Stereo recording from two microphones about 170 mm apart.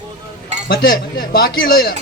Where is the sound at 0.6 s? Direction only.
60° left (ahead or behind).